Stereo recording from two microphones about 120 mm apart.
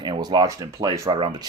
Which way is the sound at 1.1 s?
45° right (ahead or behind).